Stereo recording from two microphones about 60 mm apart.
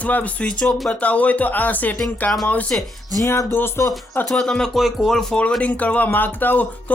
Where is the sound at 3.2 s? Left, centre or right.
Left.